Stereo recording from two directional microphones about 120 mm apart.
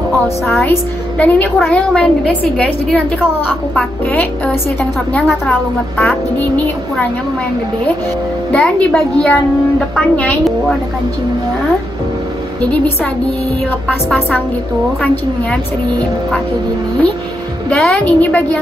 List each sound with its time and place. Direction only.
0.7 s a woman's voice: 15° left (ahead or behind)
8.5 s a woman's voice: 10° left (ahead or behind)
12.7 s a woman's voice: 10° left (ahead or behind)
17.6 s a woman's voice: 5° left (ahead or behind)
18.0 s a woman's voice: 15° left (ahead or behind)